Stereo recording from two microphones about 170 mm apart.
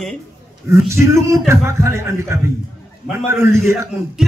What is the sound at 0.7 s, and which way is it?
A man's voice, 15° right (ahead or behind).